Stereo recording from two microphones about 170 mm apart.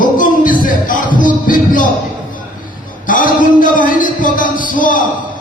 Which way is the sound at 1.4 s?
50° left (ahead or behind).